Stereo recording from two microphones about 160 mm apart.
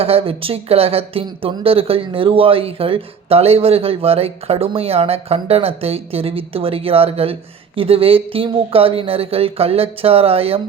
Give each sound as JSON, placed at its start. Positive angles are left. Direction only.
{"t": 0.0, "sound": "speech", "side_deg": -35}